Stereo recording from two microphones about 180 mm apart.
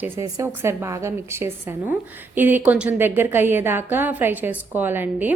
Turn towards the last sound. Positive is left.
turn(degrees=-10)  # may be behind; listen again after turning